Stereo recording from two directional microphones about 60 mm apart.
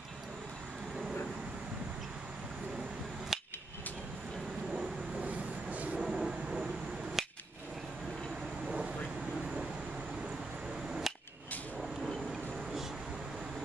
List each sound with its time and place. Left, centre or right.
3.3 s hammer: centre
5.2 s vehicle: right
5.9 s train: centre
7.2 s a sound: centre
8.6 s vehicle: centre
10.9 s a sound: centre